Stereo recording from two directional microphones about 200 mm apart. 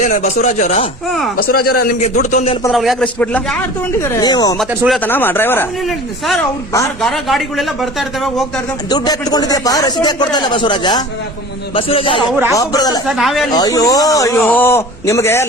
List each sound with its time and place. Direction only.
0.0 s speech: 40° left (ahead or behind)
1.5 s a man's voice: 50° left (ahead or behind)
2.0 s speech: 35° left (ahead or behind)
2.7 s speech: centre (ahead or behind)
4.0 s speech: 15° left (ahead or behind)
4.9 s a man's voice: 10° left (ahead or behind)
5.8 s speech: centre (ahead or behind)
8.9 s speech: 20° left (ahead or behind)
13.1 s speech: centre (ahead or behind)
13.5 s a man's voice: 20° left (ahead or behind)